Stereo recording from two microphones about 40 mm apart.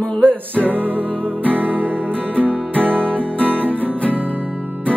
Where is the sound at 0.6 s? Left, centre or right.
Right.